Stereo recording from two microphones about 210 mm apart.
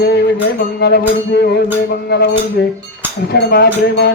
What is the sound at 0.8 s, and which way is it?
Music, 50° left (ahead or behind).